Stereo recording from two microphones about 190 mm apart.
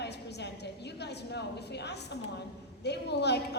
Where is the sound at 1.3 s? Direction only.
60° left (ahead or behind).